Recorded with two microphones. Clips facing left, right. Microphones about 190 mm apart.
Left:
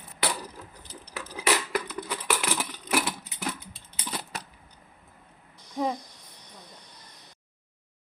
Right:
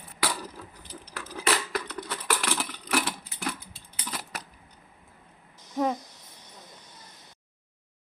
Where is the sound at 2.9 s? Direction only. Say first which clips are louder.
Left 1 dB; 20° left (ahead or behind).